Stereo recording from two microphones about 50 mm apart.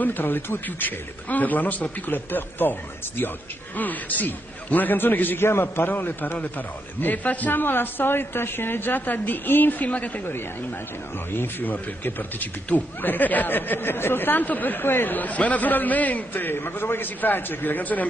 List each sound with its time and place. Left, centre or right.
0.0 s a man's voice: left
5.5 s a man's voice: left
5.9 s a man's voice: left
11.3 s a man's voice: left
15.1 s a man's voice: left